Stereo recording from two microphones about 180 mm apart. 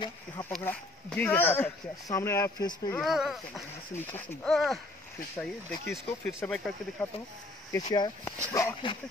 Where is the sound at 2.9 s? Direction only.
Centre (ahead or behind).